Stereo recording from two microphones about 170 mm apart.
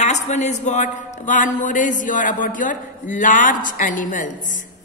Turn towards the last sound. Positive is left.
turn(degrees=50)  # may be behind; listen again after turning